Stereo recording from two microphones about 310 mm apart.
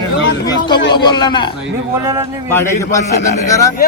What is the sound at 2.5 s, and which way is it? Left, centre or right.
Speech, centre.